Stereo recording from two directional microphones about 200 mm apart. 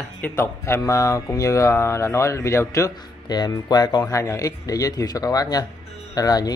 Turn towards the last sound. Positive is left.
turn(degrees=20)  # may be behind; listen again after turning